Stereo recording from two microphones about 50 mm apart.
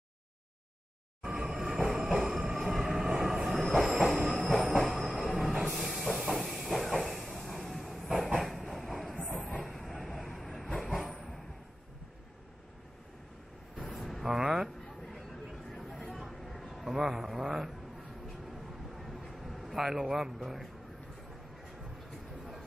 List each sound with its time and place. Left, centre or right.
1.2 s music: centre
1.8 s train: centre
9.3 s train: left
9.7 s train: centre
10.0 s vehicle: centre
11.0 s a sound: centre
13.8 s vehicle: centre
14.3 s a sound: centre